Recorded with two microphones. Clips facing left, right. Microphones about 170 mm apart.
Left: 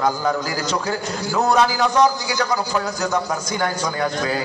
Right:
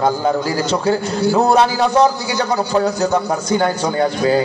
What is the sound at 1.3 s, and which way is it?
Mantra, 30° right (ahead or behind).